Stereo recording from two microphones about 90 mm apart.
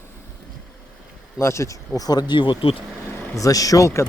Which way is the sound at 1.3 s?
30° left (ahead or behind).